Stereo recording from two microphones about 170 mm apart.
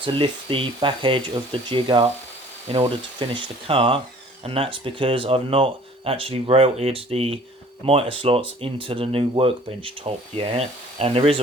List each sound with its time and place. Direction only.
0.0 s speech: 30° right (ahead or behind)